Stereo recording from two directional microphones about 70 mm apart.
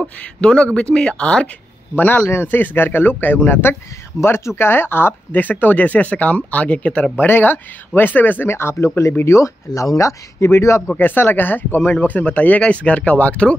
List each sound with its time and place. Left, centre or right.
0.0 s speech: centre
2.0 s speech: left
11.0 s speech: left